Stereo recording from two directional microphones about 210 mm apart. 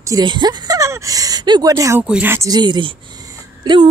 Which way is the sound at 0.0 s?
20° right (ahead or behind).